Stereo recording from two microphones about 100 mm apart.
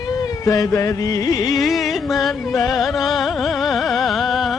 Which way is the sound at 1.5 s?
Centre (ahead or behind).